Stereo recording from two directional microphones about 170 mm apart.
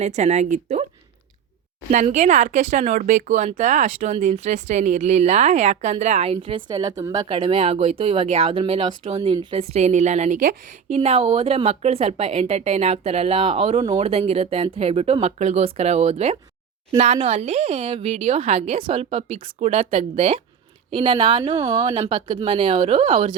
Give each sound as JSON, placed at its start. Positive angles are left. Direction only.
{"t": 0.0, "sound": "a woman's voice", "side_deg": -40}
{"t": 1.9, "sound": "a woman's voice", "side_deg": -45}